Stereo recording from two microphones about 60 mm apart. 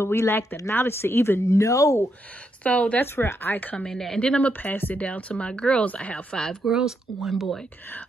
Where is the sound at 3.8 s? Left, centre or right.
Centre.